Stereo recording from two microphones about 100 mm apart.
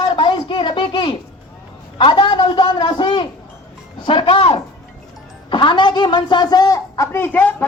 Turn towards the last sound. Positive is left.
turn(degrees=20)  # may be behind; listen again after turning